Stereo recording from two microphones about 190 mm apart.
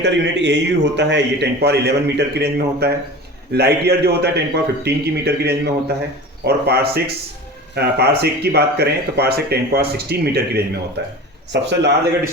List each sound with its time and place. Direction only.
0.0 s a man's voice: 65° right (ahead or behind)